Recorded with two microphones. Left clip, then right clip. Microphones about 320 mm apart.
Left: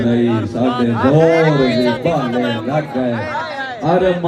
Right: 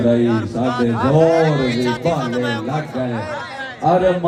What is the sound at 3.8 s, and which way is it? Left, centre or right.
Speech, right.